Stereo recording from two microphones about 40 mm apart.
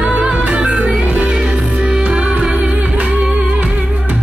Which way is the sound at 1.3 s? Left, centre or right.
Centre.